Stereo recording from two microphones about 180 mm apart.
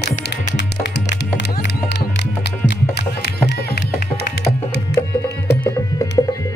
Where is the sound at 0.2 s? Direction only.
65° left (ahead or behind).